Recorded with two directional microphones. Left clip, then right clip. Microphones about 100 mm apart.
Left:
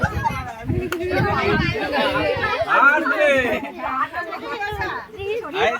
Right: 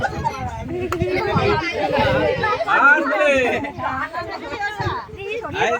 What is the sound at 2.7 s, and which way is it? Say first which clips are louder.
Chatter: right 1 dB; 10° left (ahead or behind).